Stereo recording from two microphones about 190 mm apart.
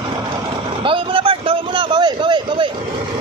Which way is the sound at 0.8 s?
30° right (ahead or behind).